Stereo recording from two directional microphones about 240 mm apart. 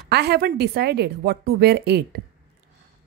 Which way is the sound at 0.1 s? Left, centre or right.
Right.